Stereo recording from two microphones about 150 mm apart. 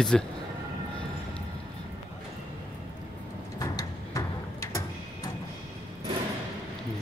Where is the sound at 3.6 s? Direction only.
25° left (ahead or behind).